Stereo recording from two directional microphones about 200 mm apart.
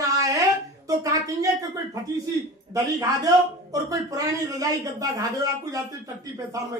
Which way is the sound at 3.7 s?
15° right (ahead or behind).